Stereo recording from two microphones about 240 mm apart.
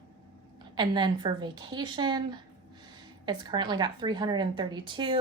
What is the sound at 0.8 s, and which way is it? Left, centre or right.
A woman's voice, centre.